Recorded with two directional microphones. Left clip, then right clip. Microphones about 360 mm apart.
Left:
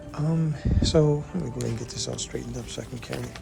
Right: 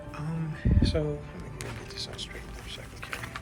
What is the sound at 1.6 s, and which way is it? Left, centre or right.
Speech, centre.